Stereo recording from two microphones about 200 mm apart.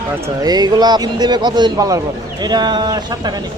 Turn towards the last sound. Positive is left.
turn(degrees=-20)  # may be behind; listen again after turning